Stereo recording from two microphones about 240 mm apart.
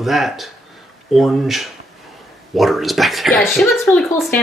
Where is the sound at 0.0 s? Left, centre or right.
Centre.